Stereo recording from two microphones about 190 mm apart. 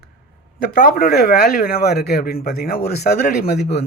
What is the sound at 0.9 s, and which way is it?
Speech, 50° left (ahead or behind).